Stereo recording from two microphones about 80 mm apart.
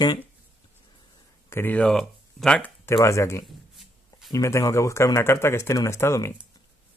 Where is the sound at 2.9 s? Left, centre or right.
Left.